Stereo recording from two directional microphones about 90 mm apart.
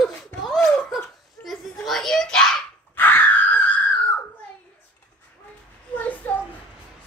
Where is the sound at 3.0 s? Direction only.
20° left (ahead or behind).